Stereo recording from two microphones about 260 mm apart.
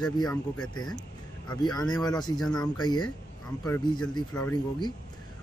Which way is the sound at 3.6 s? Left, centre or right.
Centre.